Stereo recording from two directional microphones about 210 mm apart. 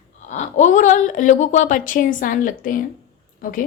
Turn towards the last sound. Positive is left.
turn(degrees=40)  # may be behind; listen again after turning